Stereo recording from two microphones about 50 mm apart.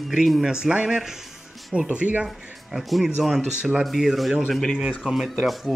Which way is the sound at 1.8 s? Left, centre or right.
Right.